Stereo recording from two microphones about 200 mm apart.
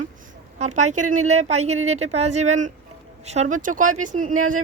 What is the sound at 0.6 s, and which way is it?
Speech, 35° right (ahead or behind).